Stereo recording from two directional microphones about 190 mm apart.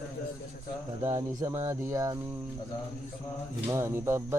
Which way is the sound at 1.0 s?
15° right (ahead or behind).